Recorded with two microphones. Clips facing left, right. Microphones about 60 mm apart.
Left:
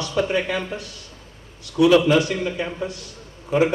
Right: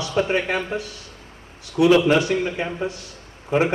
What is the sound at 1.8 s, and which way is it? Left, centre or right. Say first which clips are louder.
A man's voice: even; right.